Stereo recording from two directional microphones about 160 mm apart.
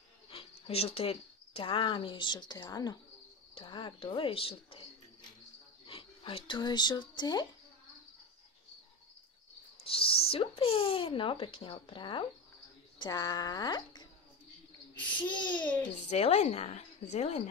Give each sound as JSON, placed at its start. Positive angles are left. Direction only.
{"t": 0.3, "sound": "speech", "side_deg": 35}
{"t": 5.9, "sound": "speech", "side_deg": 35}
{"t": 9.8, "sound": "speech", "side_deg": 35}
{"t": 15.1, "sound": "speech", "side_deg": 30}
{"t": 16.1, "sound": "speech", "side_deg": 40}